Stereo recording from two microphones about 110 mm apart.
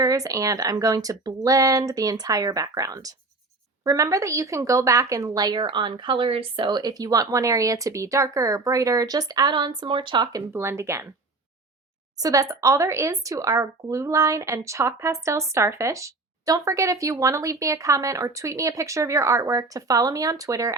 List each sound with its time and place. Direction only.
0.0 s a woman's voice: 30° right (ahead or behind); by 10.2 s 45° right (ahead or behind)
10.3 s speech: 25° right (ahead or behind)
12.1 s speech: 35° right (ahead or behind)